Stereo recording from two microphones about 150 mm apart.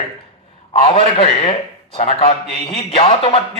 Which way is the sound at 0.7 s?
35° left (ahead or behind).